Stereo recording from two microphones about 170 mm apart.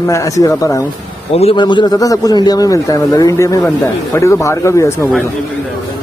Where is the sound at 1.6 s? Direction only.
25° left (ahead or behind).